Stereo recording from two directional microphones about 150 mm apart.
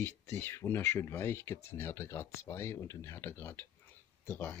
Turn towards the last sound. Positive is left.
turn(degrees=15)  # may be behind; listen again after turning